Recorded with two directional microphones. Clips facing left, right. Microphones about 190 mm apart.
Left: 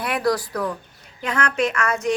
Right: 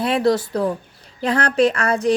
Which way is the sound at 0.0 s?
25° right (ahead or behind).